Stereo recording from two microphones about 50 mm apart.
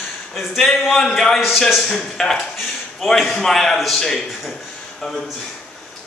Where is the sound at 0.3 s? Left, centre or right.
Centre.